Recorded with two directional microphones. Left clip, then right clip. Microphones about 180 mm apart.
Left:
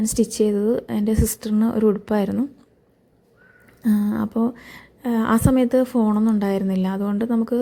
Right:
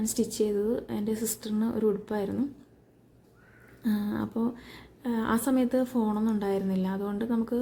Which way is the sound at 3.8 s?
30° left (ahead or behind).